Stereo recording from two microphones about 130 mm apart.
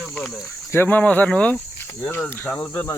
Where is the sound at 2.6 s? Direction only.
25° left (ahead or behind).